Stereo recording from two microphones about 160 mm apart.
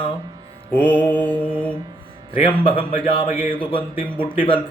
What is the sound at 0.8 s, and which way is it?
Mantra, 10° left (ahead or behind).